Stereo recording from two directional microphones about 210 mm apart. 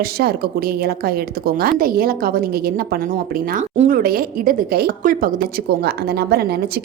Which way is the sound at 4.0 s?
45° right (ahead or behind).